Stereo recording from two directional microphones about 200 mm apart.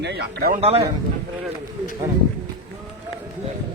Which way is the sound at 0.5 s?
30° right (ahead or behind).